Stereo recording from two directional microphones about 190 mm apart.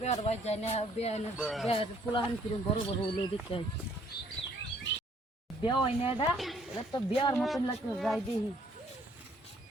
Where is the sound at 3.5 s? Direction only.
30° left (ahead or behind).